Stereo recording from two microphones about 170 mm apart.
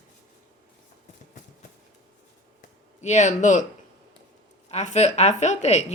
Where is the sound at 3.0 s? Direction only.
45° left (ahead or behind).